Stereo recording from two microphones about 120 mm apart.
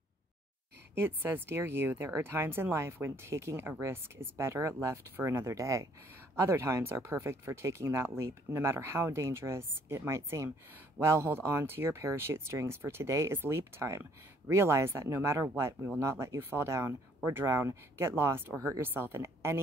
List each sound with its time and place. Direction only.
0.9 s speech: 20° right (ahead or behind)